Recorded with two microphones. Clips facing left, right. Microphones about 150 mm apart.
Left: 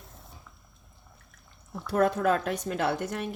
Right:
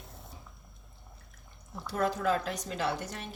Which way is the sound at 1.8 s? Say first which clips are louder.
Left 6 dB; 55° left (ahead or behind).